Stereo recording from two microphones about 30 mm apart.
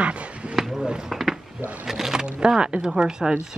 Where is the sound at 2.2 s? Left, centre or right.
Right.